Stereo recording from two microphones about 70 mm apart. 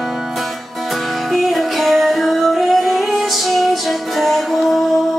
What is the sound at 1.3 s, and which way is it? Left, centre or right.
Music, centre.